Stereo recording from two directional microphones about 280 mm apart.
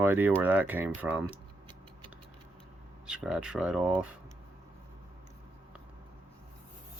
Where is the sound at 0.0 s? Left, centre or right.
Centre.